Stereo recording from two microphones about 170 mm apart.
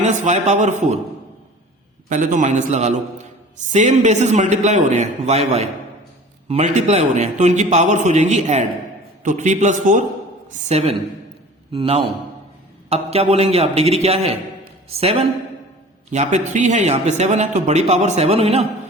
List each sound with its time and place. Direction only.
0.0 s a man's voice: 45° right (ahead or behind)
2.0 s a man's voice: 50° right (ahead or behind)